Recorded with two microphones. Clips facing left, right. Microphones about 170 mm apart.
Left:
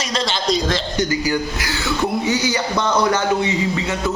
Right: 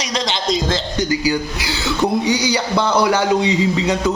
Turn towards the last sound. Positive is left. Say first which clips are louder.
# right 4 dB
turn(degrees=-15)  # may be behind; listen again after turning